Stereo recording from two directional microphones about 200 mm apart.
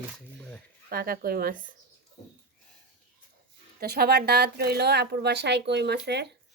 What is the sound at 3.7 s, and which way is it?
A woman's voice, 50° right (ahead or behind).